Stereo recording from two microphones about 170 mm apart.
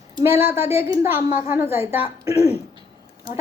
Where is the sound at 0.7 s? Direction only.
15° right (ahead or behind).